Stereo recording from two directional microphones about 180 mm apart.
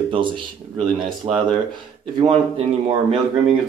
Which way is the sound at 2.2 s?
25° right (ahead or behind).